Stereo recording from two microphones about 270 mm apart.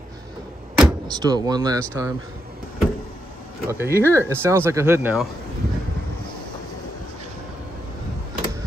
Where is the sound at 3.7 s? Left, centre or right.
Centre.